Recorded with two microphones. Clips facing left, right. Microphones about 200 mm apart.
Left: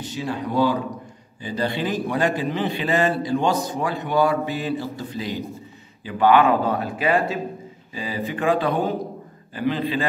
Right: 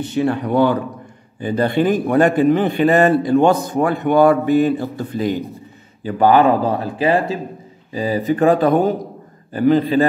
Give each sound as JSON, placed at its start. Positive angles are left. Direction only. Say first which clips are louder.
{"t": 0.0, "sound": "a man's voice", "louder": "right 9 dB", "side_deg": -60}
{"t": 6.0, "sound": "a man's voice", "louder": "right 4 dB", "side_deg": -40}